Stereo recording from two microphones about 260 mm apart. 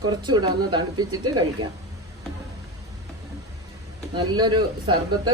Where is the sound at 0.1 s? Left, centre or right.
Centre.